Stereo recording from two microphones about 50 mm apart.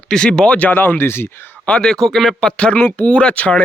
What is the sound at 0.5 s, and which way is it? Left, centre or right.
Speech, left.